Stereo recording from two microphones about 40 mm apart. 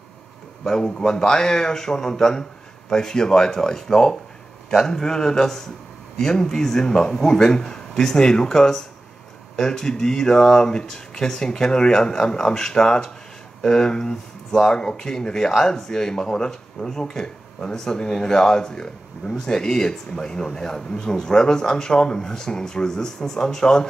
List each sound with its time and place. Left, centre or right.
0.7 s speech: centre